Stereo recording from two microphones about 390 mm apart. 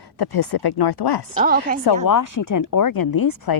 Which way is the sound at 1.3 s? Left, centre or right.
Right.